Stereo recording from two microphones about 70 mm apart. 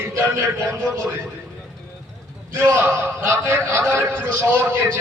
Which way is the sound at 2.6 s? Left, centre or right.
Right.